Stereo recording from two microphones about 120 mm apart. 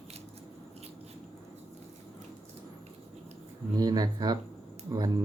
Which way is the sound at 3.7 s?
35° right (ahead or behind).